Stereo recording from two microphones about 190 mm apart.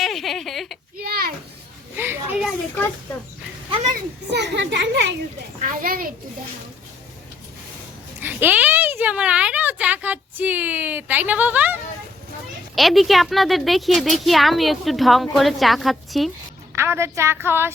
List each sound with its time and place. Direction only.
0.0 s speech: centre (ahead or behind)
0.9 s a sound: 50° right (ahead or behind)
2.0 s children playing: 10° right (ahead or behind)
2.5 s speech: 5° left (ahead or behind)
4.3 s a child's voice: 65° right (ahead or behind)
5.6 s a child's voice: 50° right (ahead or behind)
8.2 s speech: 10° right (ahead or behind)
16.7 s speech: 15° right (ahead or behind)